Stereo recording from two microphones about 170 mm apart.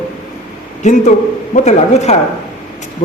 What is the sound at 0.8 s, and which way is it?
A man's voice, 45° left (ahead or behind).